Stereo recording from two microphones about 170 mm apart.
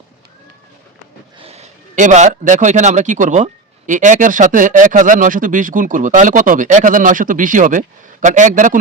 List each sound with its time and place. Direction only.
1.4 s a man's voice: 40° right (ahead or behind)